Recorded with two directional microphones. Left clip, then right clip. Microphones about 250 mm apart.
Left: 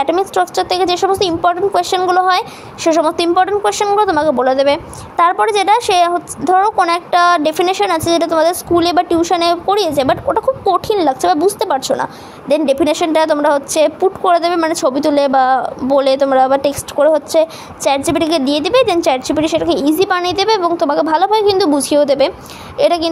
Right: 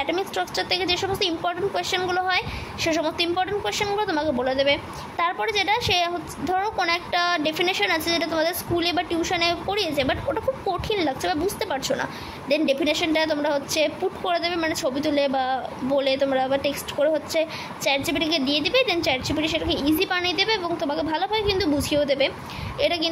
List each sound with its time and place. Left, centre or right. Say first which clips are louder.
0.0 s a woman's voice: left 11 dB; left